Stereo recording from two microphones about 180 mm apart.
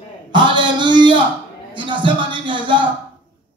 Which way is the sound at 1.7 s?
25° right (ahead or behind).